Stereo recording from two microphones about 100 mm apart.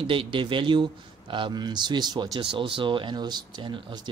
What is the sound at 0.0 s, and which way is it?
Speech, 60° right (ahead or behind).